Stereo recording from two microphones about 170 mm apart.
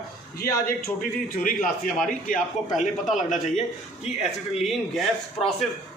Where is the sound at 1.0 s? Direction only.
50° left (ahead or behind).